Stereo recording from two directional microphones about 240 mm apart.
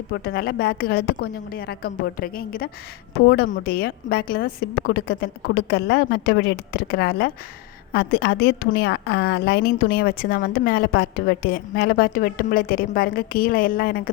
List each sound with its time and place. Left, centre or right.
0.1 s a woman's voice: left